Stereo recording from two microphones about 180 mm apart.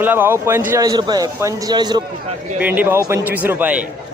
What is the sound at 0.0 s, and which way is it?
A man's voice, 10° right (ahead or behind).